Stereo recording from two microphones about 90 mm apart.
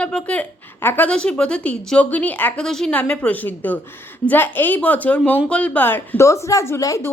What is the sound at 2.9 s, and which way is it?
A woman's voice, 15° left (ahead or behind).